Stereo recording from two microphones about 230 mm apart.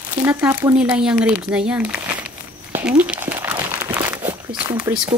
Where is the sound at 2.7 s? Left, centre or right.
Centre.